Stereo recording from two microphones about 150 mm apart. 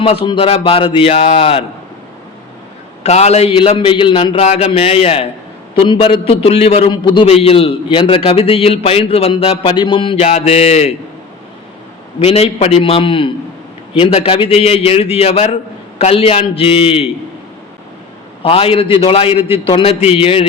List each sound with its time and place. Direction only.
0.0 s a man's voice: 40° left (ahead or behind)
3.0 s a man's voice: 45° left (ahead or behind)
6.9 s a man's voice: 30° left (ahead or behind)
7.3 s a man's voice: 40° left (ahead or behind)
10.2 s a man's voice: 45° left (ahead or behind)
12.2 s a man's voice: 40° left (ahead or behind)
18.4 s a man's voice: 40° left (ahead or behind)